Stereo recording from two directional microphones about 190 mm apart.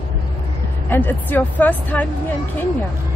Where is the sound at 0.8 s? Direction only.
10° left (ahead or behind).